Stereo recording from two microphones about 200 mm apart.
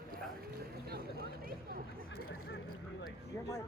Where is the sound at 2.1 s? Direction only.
90° left.